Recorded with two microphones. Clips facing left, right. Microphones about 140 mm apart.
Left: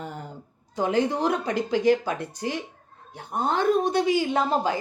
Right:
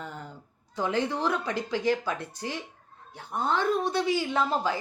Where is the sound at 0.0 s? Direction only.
15° left (ahead or behind).